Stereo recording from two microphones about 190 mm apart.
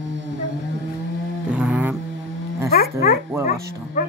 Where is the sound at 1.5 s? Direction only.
5° right (ahead or behind).